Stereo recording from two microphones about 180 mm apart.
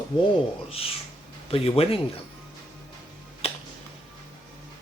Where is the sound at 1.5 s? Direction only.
35° left (ahead or behind).